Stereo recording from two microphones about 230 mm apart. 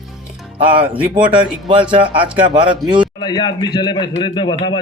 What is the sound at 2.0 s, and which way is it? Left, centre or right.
Speech, right.